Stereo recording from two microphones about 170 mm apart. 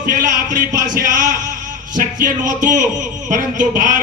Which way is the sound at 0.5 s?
50° right (ahead or behind).